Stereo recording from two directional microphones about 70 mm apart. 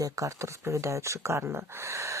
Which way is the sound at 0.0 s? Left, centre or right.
Right.